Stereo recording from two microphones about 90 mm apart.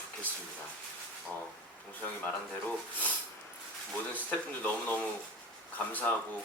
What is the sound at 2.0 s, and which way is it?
Speech, 15° left (ahead or behind).